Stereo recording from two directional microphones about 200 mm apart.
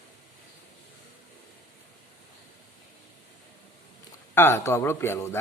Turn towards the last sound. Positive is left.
turn(degrees=15)  # may be behind; listen again after turning